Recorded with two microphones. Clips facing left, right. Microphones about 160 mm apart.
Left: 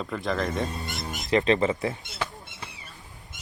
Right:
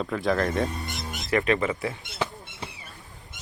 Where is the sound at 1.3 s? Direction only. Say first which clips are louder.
Left 2 dB; 25° left (ahead or behind).